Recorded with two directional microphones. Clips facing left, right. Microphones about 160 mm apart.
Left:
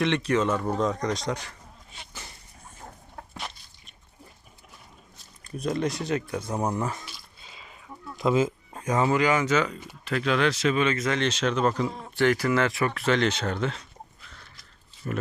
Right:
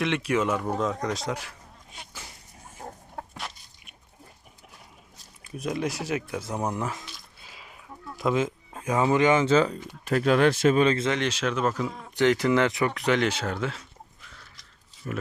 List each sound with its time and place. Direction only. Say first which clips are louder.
0.0 s a man's voice: left 1 dB; 5° right (ahead or behind)
3.3 s a sound: even; centre (ahead or behind)
5.4 s a sound: left 2 dB; 5° right (ahead or behind)
8.3 s speech: left 2 dB; centre (ahead or behind)
9.1 s speech: right 6 dB; 25° right (ahead or behind)
10.0 s speech: right 4 dB; 45° right (ahead or behind); by 11.2 s 25° right (ahead or behind)
11.2 s speech: left 2 dB; 10° right (ahead or behind)
12.1 s speech: right 2 dB; 20° right (ahead or behind)
14.3 s a sound: left 1 dB; centre (ahead or behind)
15.1 s speech: left 2 dB; centre (ahead or behind)